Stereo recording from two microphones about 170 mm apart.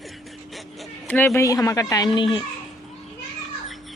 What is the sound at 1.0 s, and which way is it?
A woman's voice, 10° left (ahead or behind).